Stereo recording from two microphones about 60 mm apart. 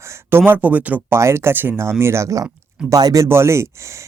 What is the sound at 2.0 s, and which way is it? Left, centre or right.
Speech, right.